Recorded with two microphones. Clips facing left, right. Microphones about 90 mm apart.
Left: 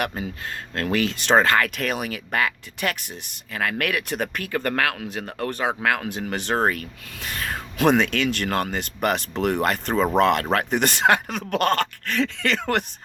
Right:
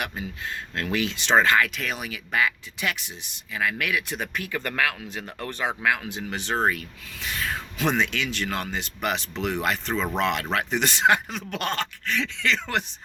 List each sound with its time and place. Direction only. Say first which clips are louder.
0.1 s speech: left 2 dB; 50° left (ahead or behind)